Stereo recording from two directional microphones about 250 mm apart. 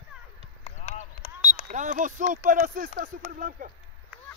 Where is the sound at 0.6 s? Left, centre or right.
Left.